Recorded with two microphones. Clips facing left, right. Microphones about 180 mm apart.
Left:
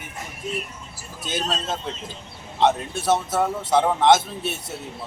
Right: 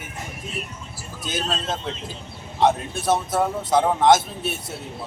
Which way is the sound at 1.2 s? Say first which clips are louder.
Even; centre (ahead or behind).